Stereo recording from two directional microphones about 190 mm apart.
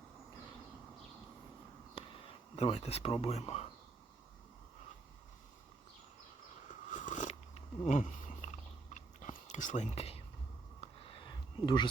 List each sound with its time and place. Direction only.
2.6 s speech: 35° left (ahead or behind)
6.9 s biting: 40° left (ahead or behind)
10.8 s a sound: 25° left (ahead or behind)